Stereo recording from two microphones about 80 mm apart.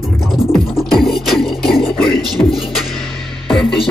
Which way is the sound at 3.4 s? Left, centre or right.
Centre.